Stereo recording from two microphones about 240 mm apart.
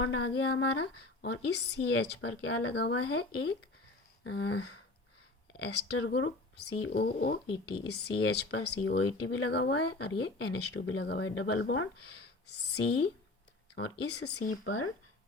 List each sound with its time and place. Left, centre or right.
0.0 s speech: left
4.2 s a sound: left
5.6 s speech: left
14.5 s speech: left